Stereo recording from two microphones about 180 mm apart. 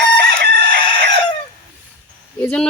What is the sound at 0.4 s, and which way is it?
Chicken, 60° right (ahead or behind).